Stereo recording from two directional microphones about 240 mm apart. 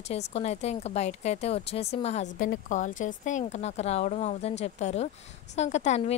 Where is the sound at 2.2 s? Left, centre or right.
Left.